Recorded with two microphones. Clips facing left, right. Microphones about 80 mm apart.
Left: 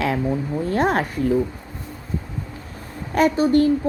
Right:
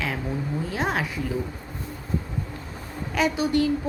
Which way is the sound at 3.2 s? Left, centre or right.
Left.